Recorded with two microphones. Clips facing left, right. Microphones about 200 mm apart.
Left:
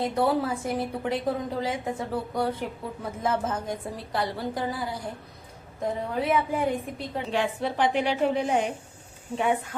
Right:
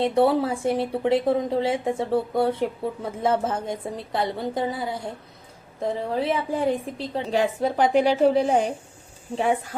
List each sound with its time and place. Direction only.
0.0 s a woman's voice: 25° right (ahead or behind)
7.3 s a woman's voice: 40° right (ahead or behind)